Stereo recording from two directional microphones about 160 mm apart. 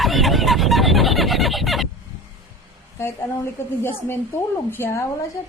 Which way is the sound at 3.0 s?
15° left (ahead or behind).